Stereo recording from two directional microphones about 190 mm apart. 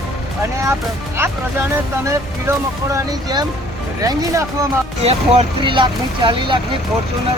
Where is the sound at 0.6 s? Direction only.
15° right (ahead or behind).